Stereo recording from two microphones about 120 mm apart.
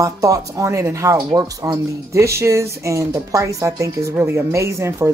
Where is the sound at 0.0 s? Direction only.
30° right (ahead or behind).